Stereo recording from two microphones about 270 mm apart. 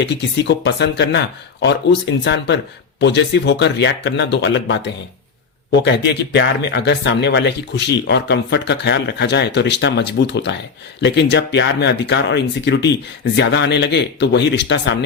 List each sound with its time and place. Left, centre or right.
0.0 s speech: left